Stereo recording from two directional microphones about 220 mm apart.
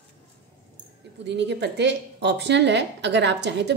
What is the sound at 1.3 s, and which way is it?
A woman's voice, 50° right (ahead or behind).